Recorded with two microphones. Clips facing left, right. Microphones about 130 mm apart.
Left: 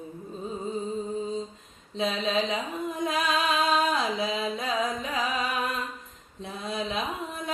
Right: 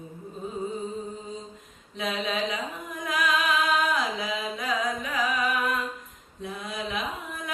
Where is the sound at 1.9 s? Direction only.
25° left (ahead or behind).